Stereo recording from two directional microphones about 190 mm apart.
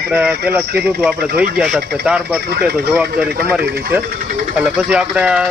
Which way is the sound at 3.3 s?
50° right (ahead or behind).